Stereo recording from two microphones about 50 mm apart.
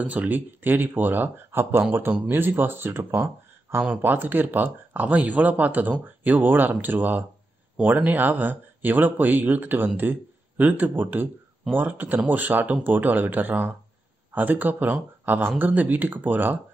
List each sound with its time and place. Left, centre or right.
0.0 s speech: right
4.0 s speech: right